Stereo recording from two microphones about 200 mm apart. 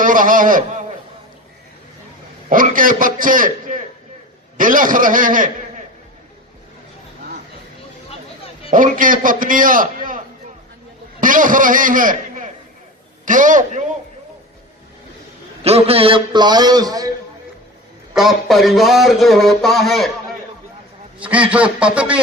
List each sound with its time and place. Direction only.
0.0 s a man's voice: 40° right (ahead or behind)
2.5 s a man's voice: 45° right (ahead or behind)
8.7 s a man's voice: 40° right (ahead or behind)
11.2 s a man's voice: 40° right (ahead or behind)
15.6 s a man's voice: 30° right (ahead or behind)
18.1 s a man's voice: centre (ahead or behind)
21.2 s a man's voice: 5° right (ahead or behind)